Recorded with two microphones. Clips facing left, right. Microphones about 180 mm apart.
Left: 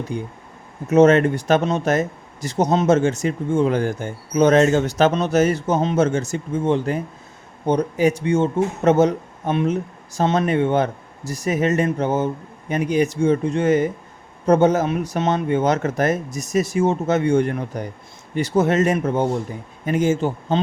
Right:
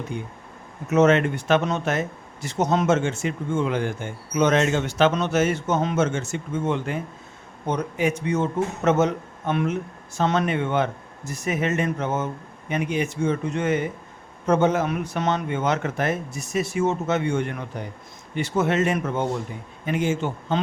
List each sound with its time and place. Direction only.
0.1 s speech: 35° left (ahead or behind)